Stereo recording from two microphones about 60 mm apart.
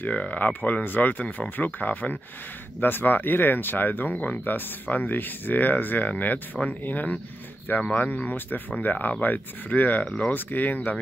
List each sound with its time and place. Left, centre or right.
0.0 s speech: left